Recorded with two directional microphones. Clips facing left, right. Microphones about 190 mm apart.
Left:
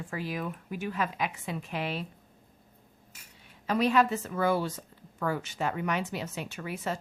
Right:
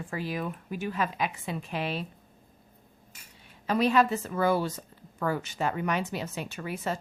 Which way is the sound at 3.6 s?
30° right (ahead or behind).